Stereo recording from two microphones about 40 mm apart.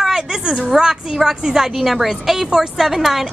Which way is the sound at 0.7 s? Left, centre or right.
Centre.